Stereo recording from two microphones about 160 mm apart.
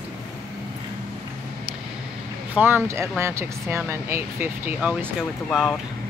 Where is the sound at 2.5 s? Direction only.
10° right (ahead or behind).